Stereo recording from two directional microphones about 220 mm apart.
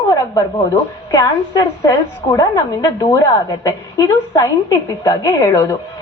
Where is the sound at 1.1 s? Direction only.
15° left (ahead or behind).